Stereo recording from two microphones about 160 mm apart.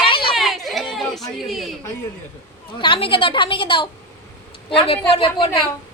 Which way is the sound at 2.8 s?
30° left (ahead or behind).